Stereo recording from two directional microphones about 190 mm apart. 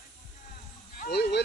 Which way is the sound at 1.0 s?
55° left (ahead or behind).